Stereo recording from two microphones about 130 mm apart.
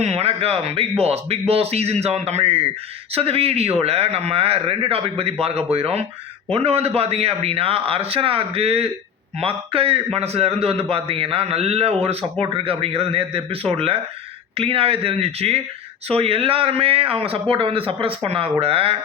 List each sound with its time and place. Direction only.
0.0 s a man's voice: 55° right (ahead or behind)